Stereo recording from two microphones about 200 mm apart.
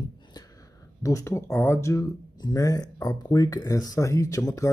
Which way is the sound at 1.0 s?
15° left (ahead or behind).